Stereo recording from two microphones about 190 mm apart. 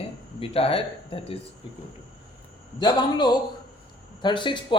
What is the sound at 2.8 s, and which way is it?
Speech, 25° left (ahead or behind).